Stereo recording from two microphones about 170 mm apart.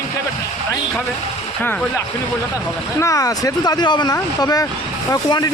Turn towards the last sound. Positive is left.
turn(degrees=20)  # may be behind; listen again after turning